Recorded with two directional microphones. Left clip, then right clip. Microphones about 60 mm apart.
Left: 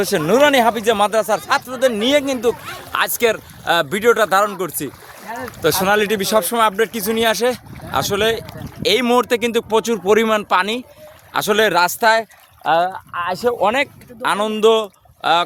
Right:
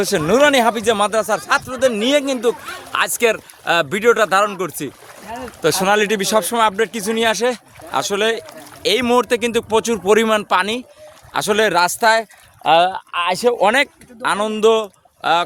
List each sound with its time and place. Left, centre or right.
0.0 s speech: centre
5.6 s speech: centre
10.0 s speech: centre
10.2 s speech: centre
12.6 s speech: right
13.2 s speech: right
14.2 s speech: centre